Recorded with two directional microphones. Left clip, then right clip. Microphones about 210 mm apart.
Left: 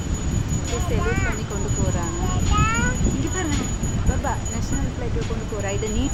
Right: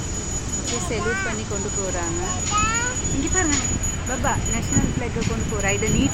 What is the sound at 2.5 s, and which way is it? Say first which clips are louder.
Speech: right 1 dB; 5° right (ahead or behind).